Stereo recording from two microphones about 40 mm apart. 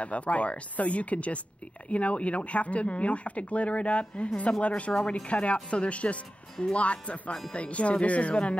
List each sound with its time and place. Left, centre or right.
0.0 s speech: left